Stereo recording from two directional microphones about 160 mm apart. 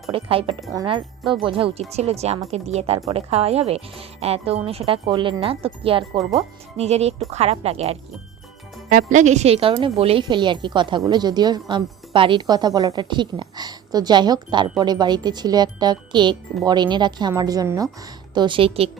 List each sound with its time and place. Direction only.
0.1 s a woman's voice: 35° right (ahead or behind)
8.9 s a woman's voice: 55° right (ahead or behind); by 18.9 s 35° right (ahead or behind)